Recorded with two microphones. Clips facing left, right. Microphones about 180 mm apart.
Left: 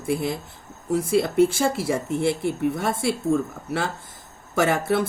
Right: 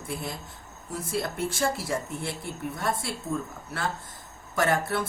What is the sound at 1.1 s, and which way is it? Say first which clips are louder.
Speech: left 11 dB; 85° left.